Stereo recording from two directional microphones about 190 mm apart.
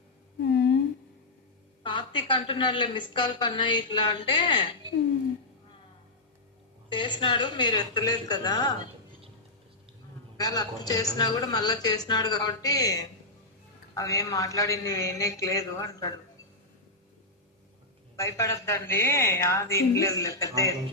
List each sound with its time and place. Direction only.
0.4 s a sound: 60° left (ahead or behind)
1.8 s a woman's voice: 25° left (ahead or behind)
6.9 s a woman's voice: 25° left (ahead or behind)
10.3 s a woman's voice: 20° left (ahead or behind)
18.2 s a woman's voice: 15° left (ahead or behind)